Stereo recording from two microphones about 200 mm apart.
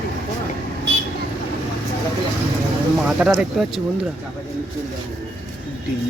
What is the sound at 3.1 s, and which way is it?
Speech, 5° right (ahead or behind).